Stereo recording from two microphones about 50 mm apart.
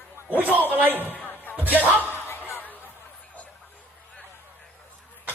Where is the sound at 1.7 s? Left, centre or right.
Right.